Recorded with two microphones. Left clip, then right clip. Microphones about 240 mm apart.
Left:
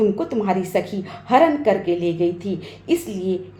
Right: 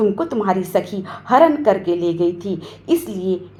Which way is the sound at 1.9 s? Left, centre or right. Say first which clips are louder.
Right 2 dB; right.